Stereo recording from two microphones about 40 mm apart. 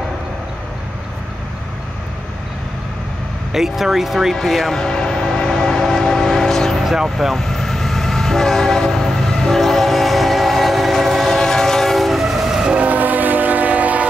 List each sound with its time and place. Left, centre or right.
3.5 s speech: centre
4.4 s train: centre
11.2 s train: centre
12.8 s train: right